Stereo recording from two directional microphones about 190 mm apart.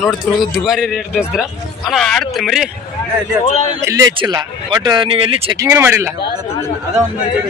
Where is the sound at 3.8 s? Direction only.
15° right (ahead or behind).